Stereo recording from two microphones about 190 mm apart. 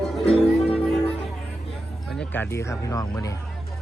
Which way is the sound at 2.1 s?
5° left (ahead or behind).